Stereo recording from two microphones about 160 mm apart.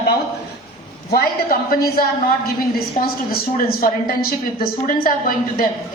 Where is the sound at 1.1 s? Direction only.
65° left (ahead or behind).